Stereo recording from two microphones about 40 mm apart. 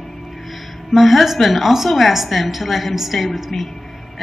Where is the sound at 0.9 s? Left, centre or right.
Centre.